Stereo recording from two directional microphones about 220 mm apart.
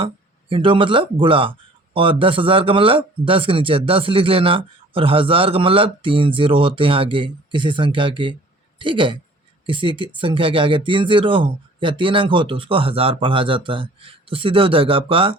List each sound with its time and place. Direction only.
0.0 s speech: 25° right (ahead or behind)